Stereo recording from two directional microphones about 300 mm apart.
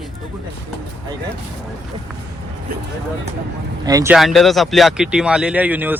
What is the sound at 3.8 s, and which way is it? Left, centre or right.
Speech, centre.